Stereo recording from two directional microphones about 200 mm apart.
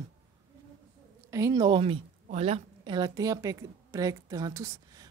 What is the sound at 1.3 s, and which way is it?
A woman's voice, 15° right (ahead or behind).